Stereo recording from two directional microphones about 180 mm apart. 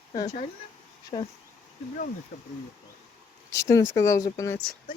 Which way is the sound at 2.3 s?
40° left (ahead or behind).